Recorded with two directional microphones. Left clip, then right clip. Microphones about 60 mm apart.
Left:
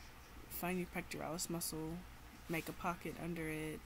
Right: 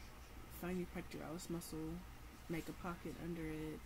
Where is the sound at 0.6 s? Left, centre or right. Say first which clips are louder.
Left 4 dB; left.